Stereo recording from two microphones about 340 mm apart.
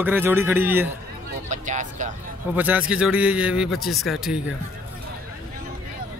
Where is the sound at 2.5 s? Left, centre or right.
Centre.